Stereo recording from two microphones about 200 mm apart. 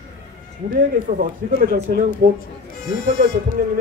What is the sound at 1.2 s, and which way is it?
A man's voice, 50° right (ahead or behind).